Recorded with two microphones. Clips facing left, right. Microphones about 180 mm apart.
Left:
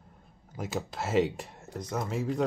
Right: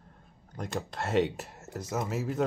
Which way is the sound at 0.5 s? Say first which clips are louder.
Left 1 dB; 5° left (ahead or behind).